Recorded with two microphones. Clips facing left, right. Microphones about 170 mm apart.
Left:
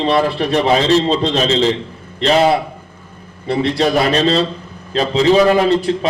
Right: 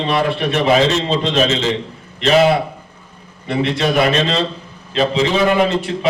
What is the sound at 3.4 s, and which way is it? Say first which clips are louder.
A man's voice: left 2 dB; 35° left (ahead or behind).